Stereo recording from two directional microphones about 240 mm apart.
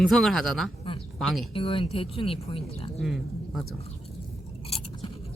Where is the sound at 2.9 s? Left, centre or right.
Centre.